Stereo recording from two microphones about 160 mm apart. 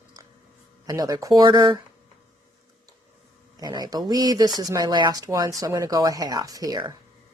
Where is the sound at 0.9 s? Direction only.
25° right (ahead or behind).